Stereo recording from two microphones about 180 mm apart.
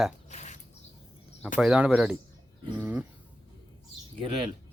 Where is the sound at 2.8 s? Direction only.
10° right (ahead or behind).